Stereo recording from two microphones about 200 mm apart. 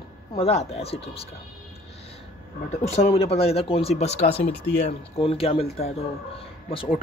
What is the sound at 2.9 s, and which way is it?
Speech, 30° left (ahead or behind).